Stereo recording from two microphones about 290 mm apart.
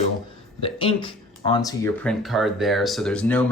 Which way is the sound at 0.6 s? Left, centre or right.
Centre.